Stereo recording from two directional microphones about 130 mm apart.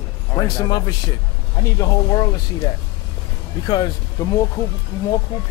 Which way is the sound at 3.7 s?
30° left (ahead or behind).